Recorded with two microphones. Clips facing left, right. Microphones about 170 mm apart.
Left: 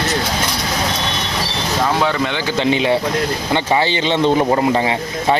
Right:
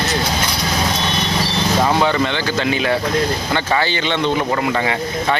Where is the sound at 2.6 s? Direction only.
25° left (ahead or behind).